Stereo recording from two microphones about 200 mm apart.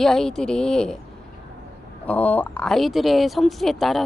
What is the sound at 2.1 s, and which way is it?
Speech, 10° left (ahead or behind).